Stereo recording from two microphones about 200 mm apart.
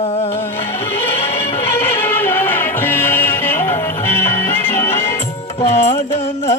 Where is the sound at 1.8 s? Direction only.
10° left (ahead or behind).